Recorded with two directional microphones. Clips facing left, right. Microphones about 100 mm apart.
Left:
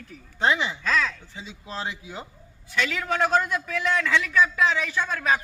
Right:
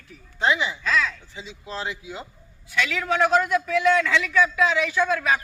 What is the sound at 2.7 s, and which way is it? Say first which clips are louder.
A man's voice: right 2 dB; 40° left (ahead or behind).